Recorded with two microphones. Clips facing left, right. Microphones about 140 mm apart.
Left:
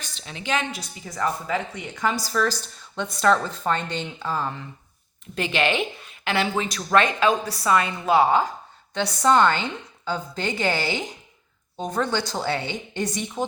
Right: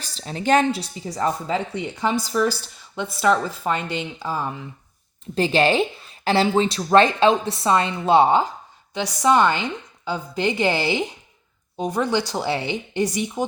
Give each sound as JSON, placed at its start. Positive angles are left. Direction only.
{"t": 0.0, "sound": "a woman's voice", "side_deg": -35}
{"t": 0.7, "sound": "a woman's voice", "side_deg": -30}
{"t": 2.3, "sound": "speech", "side_deg": -15}
{"t": 5.3, "sound": "a woman's voice", "side_deg": -35}
{"t": 9.0, "sound": "speech", "side_deg": -10}
{"t": 11.8, "sound": "speech", "side_deg": -10}